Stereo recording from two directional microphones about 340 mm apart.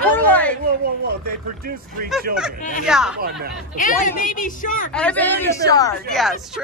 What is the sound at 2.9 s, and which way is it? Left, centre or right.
Speech, centre.